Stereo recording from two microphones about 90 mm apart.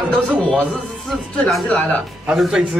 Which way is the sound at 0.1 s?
15° left (ahead or behind).